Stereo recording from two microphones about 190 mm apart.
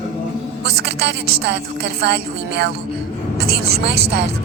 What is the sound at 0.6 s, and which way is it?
Speech, 60° right (ahead or behind).